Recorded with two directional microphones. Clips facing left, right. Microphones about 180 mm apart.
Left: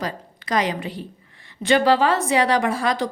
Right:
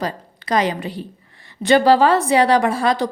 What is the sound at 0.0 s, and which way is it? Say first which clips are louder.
A woman's voice: right 3 dB; 30° right (ahead or behind).